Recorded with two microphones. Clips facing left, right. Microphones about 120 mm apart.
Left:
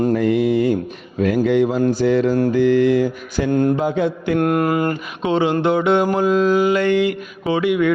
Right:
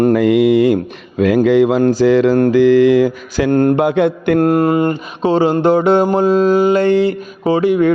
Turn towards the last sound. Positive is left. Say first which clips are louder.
# right 5 dB
turn(degrees=-35)  # may be behind; listen again after turning